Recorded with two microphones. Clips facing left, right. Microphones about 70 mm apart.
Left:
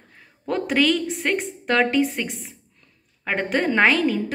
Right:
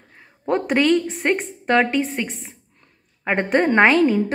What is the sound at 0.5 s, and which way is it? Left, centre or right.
Speech, right.